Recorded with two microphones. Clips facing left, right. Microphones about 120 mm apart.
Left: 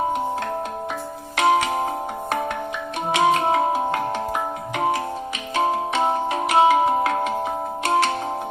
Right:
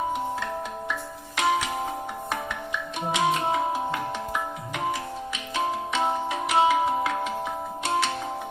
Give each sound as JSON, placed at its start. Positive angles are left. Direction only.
{"t": 1.4, "sound": "music", "side_deg": 65}